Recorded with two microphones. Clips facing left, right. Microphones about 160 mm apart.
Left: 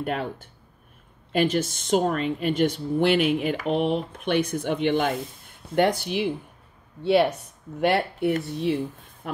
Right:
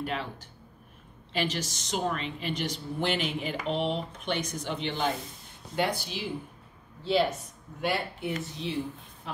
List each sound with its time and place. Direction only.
0.0 s speech: 50° left (ahead or behind)
1.3 s speech: 50° left (ahead or behind)
9.2 s a sound: 60° left (ahead or behind)